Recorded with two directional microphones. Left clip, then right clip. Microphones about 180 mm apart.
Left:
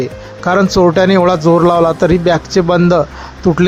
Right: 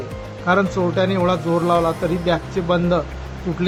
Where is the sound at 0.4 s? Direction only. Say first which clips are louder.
Left 8 dB; 45° left (ahead or behind).